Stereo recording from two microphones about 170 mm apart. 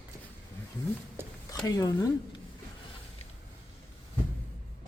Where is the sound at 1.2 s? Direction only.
15° right (ahead or behind).